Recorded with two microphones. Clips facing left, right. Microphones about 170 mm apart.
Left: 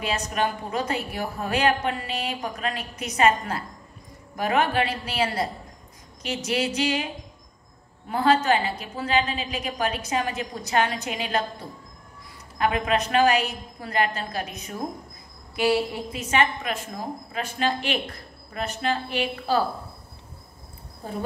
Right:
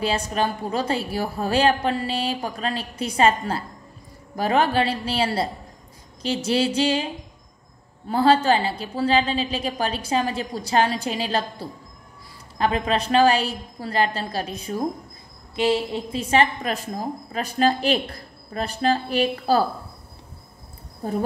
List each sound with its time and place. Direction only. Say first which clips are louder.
0.0 s a woman's voice: right 3 dB; 30° right (ahead or behind)
8.1 s a woman's voice: right 3 dB; 30° right (ahead or behind)